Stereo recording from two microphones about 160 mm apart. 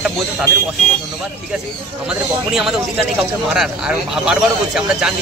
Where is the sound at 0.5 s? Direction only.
15° left (ahead or behind).